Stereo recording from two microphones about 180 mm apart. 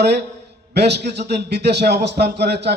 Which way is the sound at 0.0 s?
65° right (ahead or behind).